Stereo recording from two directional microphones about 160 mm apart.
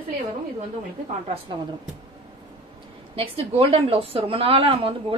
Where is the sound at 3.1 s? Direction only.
35° right (ahead or behind).